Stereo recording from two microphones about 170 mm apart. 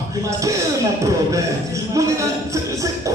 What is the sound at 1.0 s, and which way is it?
Music, 20° right (ahead or behind).